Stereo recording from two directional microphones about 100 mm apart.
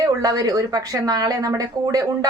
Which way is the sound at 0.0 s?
40° right (ahead or behind).